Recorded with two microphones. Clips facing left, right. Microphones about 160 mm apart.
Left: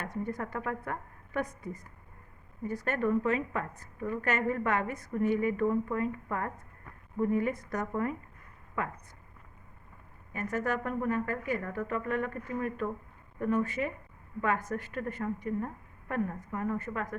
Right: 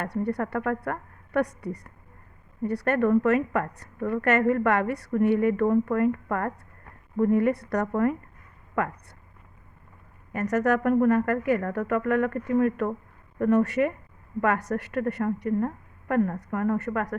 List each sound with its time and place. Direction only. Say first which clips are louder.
0.0 s a woman's voice: right 7 dB; 65° right (ahead or behind)
10.3 s a woman's voice: right 9 dB; 75° right (ahead or behind)